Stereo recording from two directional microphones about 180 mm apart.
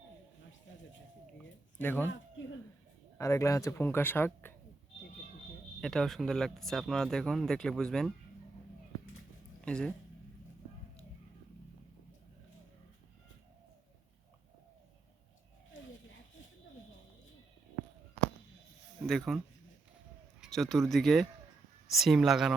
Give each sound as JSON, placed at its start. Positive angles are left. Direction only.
{"t": 0.7, "sound": "a sound", "side_deg": 90}
{"t": 1.4, "sound": "speech", "side_deg": 10}
{"t": 3.2, "sound": "speech", "side_deg": 15}
{"t": 5.8, "sound": "speech", "side_deg": 0}
{"t": 9.6, "sound": "speech", "side_deg": 5}
{"t": 19.0, "sound": "speech", "side_deg": 0}
{"t": 20.6, "sound": "speech", "side_deg": 0}